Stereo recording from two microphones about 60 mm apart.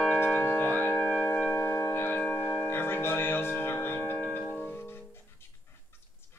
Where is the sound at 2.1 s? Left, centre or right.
Centre.